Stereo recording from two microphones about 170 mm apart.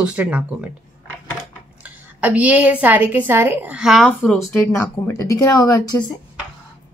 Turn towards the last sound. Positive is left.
turn(degrees=20)  # may be behind; listen again after turning